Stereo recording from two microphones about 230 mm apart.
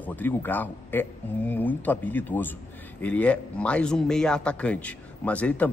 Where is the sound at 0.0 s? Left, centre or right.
Centre.